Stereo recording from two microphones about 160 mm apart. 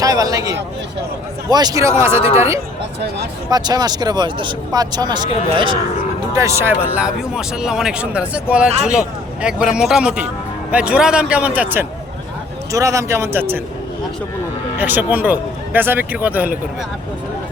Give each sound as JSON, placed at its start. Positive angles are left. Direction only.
{"t": 0.0, "sound": "a man's voice", "side_deg": -20}
{"t": 3.5, "sound": "speech", "side_deg": -25}
{"t": 6.3, "sound": "speech", "side_deg": -15}
{"t": 14.8, "sound": "speech", "side_deg": -10}